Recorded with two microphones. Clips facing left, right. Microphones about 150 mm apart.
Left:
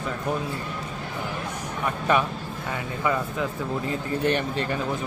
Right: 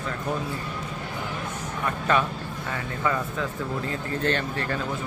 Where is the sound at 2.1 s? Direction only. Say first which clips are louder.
Left 1 dB; 15° left (ahead or behind).